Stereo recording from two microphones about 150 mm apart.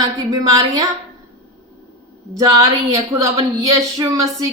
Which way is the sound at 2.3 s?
25° right (ahead or behind).